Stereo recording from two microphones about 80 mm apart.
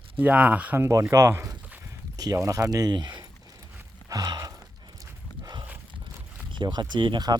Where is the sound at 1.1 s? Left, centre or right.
Right.